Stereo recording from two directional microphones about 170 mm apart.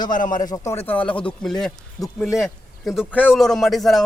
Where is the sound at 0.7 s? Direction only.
10° left (ahead or behind).